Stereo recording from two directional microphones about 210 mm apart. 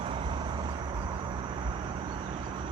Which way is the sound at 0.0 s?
25° right (ahead or behind).